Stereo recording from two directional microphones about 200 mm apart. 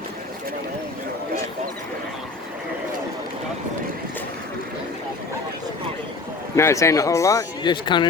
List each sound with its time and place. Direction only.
6.6 s speech: 15° left (ahead or behind)